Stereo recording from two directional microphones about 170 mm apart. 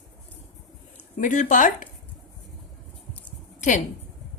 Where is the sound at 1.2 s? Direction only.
50° left (ahead or behind).